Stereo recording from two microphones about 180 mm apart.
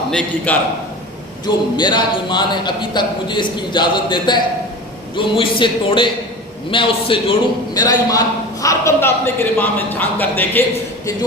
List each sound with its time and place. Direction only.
0.1 s a man's voice: 5° left (ahead or behind)
1.5 s speech: 25° left (ahead or behind)